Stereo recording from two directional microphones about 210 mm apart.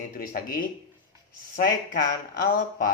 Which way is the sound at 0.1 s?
40° left (ahead or behind).